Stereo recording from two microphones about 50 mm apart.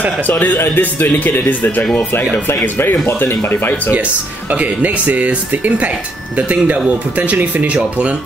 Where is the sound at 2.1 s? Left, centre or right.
Left.